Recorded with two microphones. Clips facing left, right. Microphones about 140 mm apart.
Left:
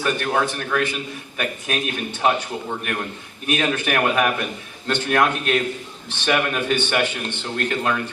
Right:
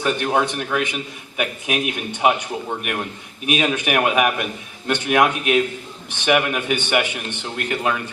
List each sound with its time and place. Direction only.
0.0 s speech: 15° right (ahead or behind)